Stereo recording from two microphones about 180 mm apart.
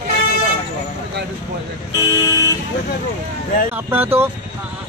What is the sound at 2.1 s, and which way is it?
Vehicle, 15° left (ahead or behind).